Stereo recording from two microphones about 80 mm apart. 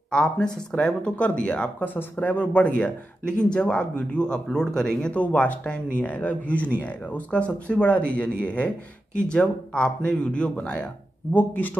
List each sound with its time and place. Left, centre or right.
0.1 s speech: centre